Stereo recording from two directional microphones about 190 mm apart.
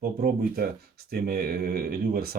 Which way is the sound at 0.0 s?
50° right (ahead or behind).